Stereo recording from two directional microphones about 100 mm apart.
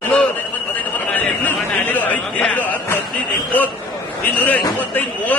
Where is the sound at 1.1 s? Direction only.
15° left (ahead or behind).